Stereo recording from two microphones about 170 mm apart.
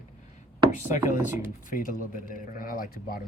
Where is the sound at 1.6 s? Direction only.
55° left (ahead or behind).